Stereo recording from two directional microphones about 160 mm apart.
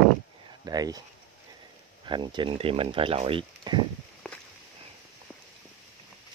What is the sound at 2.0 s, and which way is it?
Speech, 30° right (ahead or behind).